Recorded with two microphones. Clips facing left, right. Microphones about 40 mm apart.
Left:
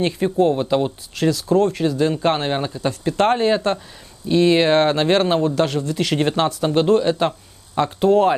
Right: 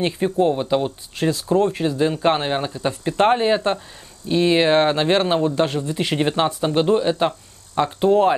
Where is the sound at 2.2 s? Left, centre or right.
Centre.